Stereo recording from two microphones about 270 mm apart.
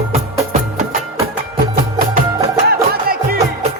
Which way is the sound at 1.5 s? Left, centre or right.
Right.